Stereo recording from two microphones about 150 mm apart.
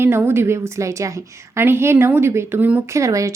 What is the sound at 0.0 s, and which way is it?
Speech, 15° right (ahead or behind).